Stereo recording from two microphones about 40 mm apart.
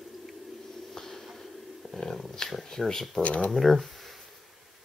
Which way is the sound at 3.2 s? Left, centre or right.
Left.